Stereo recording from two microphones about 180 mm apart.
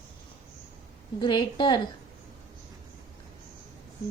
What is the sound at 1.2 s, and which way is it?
Speech, 25° left (ahead or behind).